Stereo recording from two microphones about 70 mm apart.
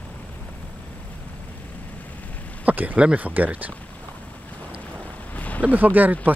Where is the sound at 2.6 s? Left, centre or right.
Right.